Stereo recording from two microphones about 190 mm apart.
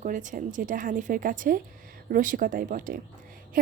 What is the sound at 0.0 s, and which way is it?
A woman's voice, 40° right (ahead or behind).